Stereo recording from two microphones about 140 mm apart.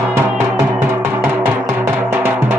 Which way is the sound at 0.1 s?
15° right (ahead or behind).